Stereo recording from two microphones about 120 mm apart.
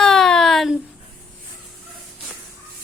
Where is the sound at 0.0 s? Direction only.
5° left (ahead or behind).